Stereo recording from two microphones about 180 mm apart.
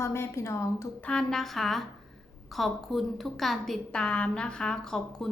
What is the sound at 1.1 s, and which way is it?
A woman's voice, 5° left (ahead or behind).